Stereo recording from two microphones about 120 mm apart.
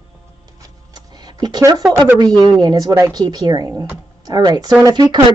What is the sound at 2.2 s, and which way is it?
A woman's voice, 35° right (ahead or behind).